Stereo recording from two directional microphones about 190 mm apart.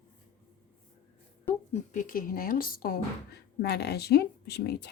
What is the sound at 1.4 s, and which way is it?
Speech, 40° left (ahead or behind).